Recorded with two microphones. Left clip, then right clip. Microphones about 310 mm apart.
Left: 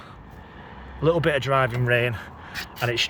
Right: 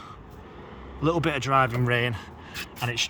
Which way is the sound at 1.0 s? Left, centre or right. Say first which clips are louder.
Left 4 dB; centre.